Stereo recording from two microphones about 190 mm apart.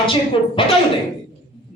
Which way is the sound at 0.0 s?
25° left (ahead or behind).